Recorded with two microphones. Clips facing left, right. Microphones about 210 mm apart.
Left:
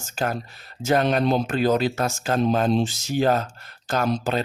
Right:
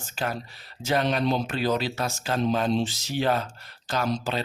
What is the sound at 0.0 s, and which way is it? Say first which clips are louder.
Speech: left 4 dB; 45° left (ahead or behind).